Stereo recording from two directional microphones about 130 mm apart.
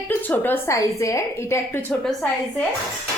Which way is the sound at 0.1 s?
15° left (ahead or behind).